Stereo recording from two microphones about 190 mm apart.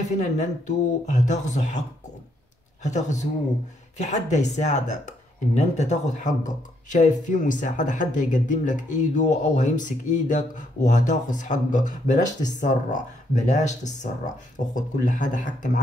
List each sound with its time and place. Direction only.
0.2 s speech: 40° left (ahead or behind)